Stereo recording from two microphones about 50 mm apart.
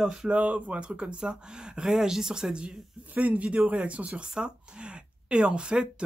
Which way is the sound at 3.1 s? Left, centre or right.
Right.